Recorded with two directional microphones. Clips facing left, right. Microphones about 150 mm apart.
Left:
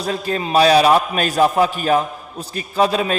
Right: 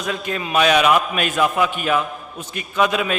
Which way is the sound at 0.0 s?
35° left (ahead or behind).